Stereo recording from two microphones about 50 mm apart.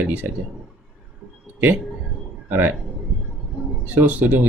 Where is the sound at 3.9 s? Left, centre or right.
Right.